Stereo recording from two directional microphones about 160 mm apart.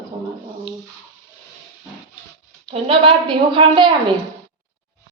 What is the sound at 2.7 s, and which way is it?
A woman's voice, 35° right (ahead or behind).